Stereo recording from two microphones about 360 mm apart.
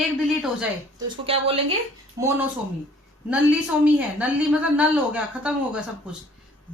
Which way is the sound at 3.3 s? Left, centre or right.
Centre.